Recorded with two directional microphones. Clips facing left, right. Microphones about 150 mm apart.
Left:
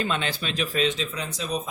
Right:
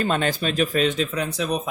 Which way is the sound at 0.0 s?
45° right (ahead or behind).